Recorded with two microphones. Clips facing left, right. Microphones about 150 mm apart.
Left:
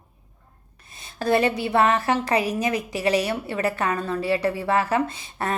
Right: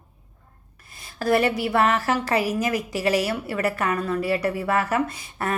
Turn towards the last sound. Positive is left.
turn(degrees=25)  # may be behind; listen again after turning